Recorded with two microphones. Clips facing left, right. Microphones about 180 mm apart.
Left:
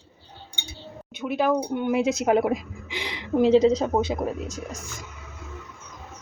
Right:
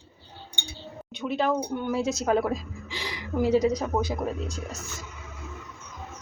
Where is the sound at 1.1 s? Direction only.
5° left (ahead or behind); by 4.2 s 25° left (ahead or behind).